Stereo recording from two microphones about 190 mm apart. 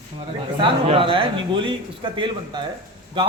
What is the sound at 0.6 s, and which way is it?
A man's voice, 30° right (ahead or behind).